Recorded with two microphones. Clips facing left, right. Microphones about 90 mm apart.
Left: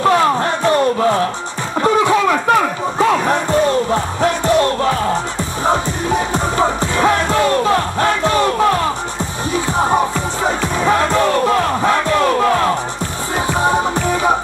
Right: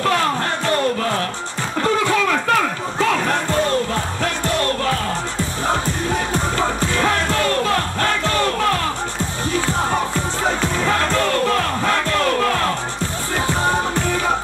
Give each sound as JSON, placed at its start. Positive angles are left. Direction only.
{"t": 0.0, "sound": "music", "side_deg": 20}
{"t": 1.8, "sound": "a sound", "side_deg": 20}
{"t": 3.0, "sound": "music", "side_deg": 20}